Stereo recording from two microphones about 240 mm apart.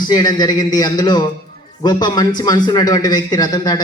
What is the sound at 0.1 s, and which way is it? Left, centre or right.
A man's voice, centre.